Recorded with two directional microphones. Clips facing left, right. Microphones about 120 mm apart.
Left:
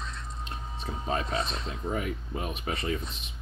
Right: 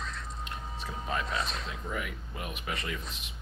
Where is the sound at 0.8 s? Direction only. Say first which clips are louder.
Left 3 dB; 35° left (ahead or behind).